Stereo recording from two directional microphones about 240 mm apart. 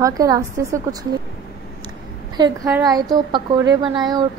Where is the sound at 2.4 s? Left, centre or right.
Centre.